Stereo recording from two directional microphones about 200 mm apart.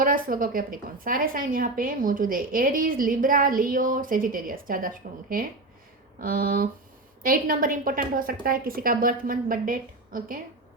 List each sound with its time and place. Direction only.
0.0 s a woman's voice: 45° right (ahead or behind)
6.1 s a woman's voice: 45° right (ahead or behind)